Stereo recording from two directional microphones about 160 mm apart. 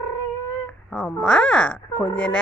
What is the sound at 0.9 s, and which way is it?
A woman's voice, 5° left (ahead or behind).